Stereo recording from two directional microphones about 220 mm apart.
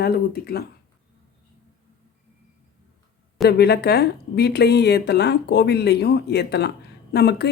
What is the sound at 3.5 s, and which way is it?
Speech, 50° left (ahead or behind).